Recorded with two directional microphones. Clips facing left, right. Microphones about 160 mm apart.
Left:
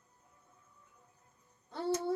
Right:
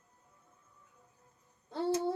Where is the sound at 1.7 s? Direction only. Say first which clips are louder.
Right 2 dB; 30° right (ahead or behind).